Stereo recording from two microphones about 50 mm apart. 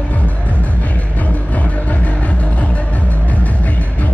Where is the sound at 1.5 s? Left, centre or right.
Left.